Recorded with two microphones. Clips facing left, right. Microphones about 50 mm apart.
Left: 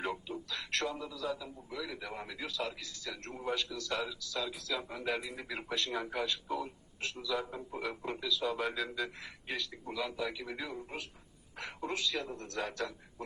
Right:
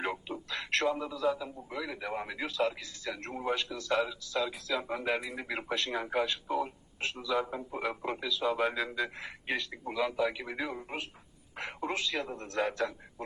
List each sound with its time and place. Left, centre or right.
0.5 s a sound: right
0.9 s a man's voice: right
1.4 s a man's voice: centre
2.4 s a man's voice: right